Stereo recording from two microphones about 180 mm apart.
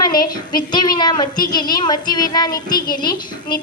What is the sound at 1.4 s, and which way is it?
Speech, 50° left (ahead or behind).